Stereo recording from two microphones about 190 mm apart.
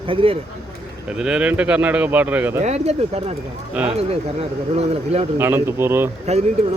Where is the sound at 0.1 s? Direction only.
30° right (ahead or behind).